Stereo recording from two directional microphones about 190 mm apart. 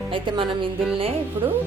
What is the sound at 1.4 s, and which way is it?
Music, 15° right (ahead or behind).